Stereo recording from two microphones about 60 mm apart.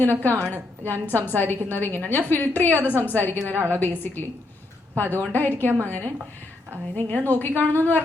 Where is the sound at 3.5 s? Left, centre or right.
Right.